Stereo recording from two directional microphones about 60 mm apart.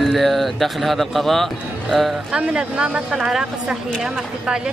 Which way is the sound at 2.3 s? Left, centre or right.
Centre.